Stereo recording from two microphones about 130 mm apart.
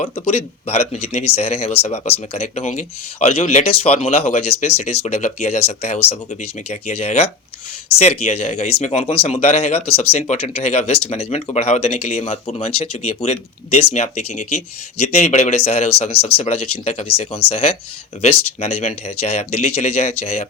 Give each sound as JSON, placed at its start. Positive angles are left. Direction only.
{"t": 0.0, "sound": "speech", "side_deg": 55}